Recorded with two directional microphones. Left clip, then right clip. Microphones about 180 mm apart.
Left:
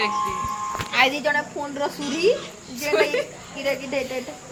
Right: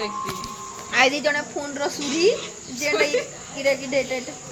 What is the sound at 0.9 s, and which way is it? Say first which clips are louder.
A woman's voice: right 1 dB; 45° right (ahead or behind).